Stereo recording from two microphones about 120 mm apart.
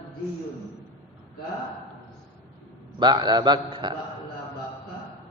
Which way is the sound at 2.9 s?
35° right (ahead or behind).